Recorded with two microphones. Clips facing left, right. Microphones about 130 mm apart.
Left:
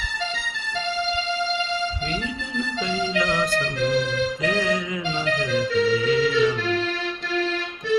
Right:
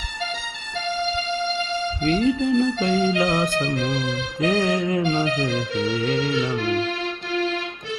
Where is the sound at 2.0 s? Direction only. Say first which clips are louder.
Right 10 dB; 40° right (ahead or behind).